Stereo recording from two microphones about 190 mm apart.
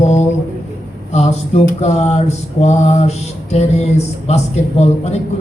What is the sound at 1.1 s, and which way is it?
Mantra, 35° left (ahead or behind).